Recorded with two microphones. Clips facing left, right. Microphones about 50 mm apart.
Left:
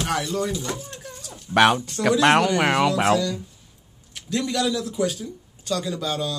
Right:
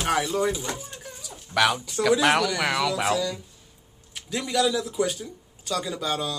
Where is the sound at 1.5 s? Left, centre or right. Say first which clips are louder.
Left 5 dB; left.